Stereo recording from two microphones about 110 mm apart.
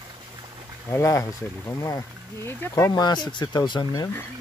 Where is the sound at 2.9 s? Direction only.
40° left (ahead or behind).